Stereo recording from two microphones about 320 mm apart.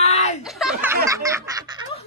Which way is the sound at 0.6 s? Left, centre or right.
Centre.